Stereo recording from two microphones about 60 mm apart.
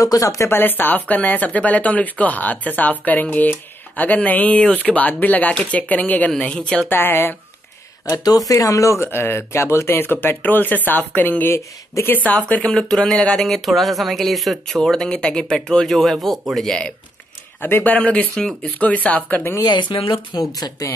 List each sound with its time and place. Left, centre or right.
0.0 s speech: left
0.5 s speech: left; by 6.9 s centre
6.9 s a woman's voice: left
8.0 s speech: left
8.5 s a woman's voice: left
11.5 s speech: left
12.1 s speech: left
12.7 s speech: centre
17.6 s a woman's voice: left
17.9 s speech: left
18.3 s speech: centre
18.8 s speech: left